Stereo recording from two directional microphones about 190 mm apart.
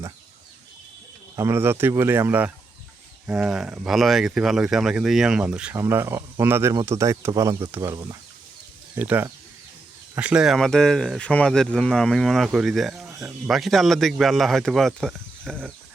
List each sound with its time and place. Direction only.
1.4 s speech: 15° right (ahead or behind); by 15.7 s 5° left (ahead or behind)